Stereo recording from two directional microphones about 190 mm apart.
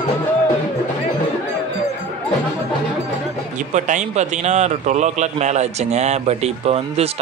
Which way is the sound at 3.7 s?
40° right (ahead or behind).